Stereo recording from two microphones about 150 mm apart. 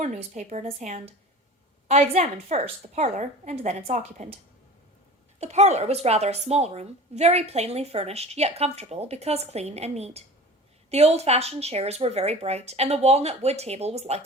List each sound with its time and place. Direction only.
0.0 s speech: 50° right (ahead or behind)
5.4 s speech: 45° right (ahead or behind)